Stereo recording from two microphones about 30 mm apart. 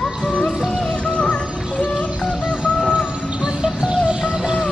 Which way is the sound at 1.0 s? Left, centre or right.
Left.